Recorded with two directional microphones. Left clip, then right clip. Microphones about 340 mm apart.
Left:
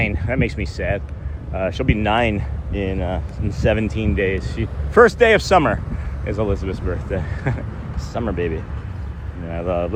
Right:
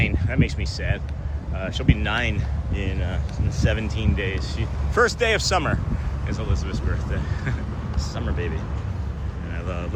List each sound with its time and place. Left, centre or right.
0.0 s speech: left
9.6 s speech: centre